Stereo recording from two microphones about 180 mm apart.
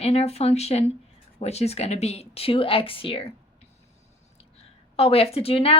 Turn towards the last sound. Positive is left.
turn(degrees=35)  # may be behind; listen again after turning